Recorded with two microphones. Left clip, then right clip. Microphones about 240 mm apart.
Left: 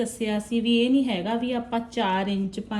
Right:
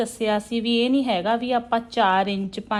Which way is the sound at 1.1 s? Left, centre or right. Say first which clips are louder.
Right 6 dB; right.